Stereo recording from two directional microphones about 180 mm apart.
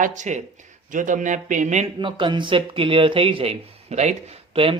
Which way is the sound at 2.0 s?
25° right (ahead or behind).